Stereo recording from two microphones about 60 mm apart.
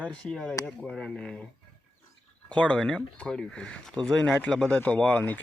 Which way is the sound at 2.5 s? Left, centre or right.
Centre.